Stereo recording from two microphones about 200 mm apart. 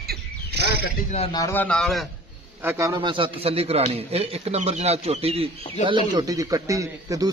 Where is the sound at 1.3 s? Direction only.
10° left (ahead or behind).